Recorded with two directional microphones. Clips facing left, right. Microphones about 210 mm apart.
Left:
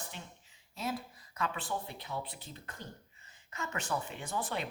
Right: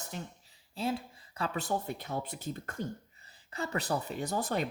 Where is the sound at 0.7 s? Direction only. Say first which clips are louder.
Right 4 dB; 30° right (ahead or behind); by 2.8 s 45° right (ahead or behind).